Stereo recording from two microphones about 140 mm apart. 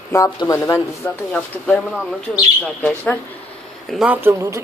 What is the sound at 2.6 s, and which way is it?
Speech, 10° left (ahead or behind).